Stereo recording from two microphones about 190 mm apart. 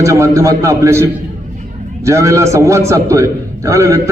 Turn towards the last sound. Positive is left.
turn(degrees=-15)  # may be behind; listen again after turning